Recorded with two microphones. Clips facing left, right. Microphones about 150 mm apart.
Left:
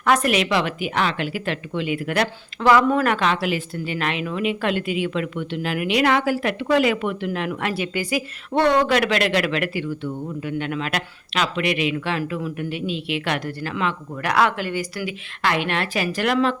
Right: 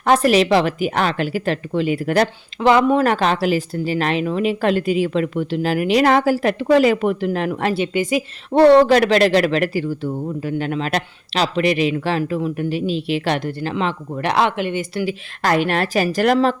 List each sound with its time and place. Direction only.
0.0 s speech: 30° right (ahead or behind)
2.6 s speech: 20° right (ahead or behind)
15.4 s speech: 40° right (ahead or behind)